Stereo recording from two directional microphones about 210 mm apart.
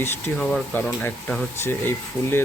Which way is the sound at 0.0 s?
5° left (ahead or behind).